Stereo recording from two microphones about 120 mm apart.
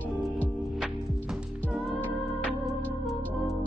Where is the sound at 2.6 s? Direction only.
25° left (ahead or behind).